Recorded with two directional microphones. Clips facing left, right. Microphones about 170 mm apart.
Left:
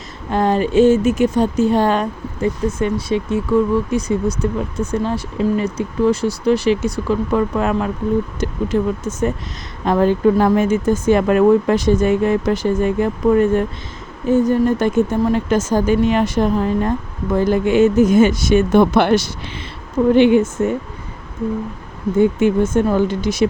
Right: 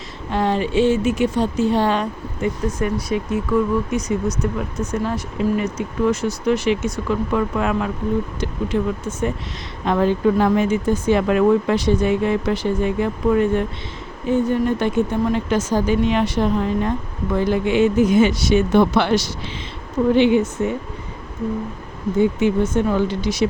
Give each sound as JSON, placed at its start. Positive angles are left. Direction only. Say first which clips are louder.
{"t": 0.3, "sound": "speech", "louder": "left 3 dB", "side_deg": 45}
{"t": 2.6, "sound": "speech", "louder": "left 3 dB", "side_deg": 25}
{"t": 22.2, "sound": "speech", "louder": "left 3 dB", "side_deg": 50}